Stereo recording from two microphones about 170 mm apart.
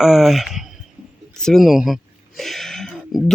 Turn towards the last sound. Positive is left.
turn(degrees=5)  # may be behind; listen again after turning